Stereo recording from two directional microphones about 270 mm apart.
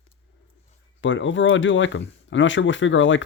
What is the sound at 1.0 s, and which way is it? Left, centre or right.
Speech, left.